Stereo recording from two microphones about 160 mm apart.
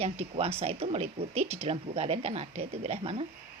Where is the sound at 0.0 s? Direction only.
40° right (ahead or behind).